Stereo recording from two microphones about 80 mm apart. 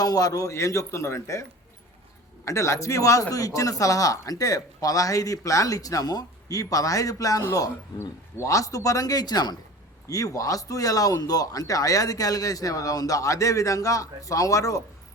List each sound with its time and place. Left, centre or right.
0.0 s a man's voice: left
10.1 s speech: left